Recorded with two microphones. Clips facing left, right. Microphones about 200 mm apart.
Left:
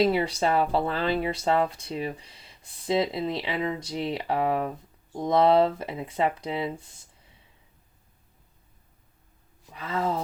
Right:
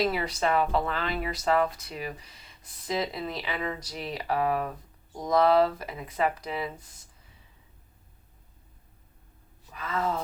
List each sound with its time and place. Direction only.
0.0 s speech: 30° left (ahead or behind)
9.7 s speech: 30° left (ahead or behind)